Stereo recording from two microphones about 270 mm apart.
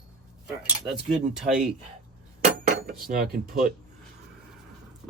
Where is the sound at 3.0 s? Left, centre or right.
Right.